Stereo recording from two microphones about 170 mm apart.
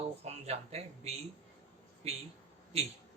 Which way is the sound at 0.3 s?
40° right (ahead or behind).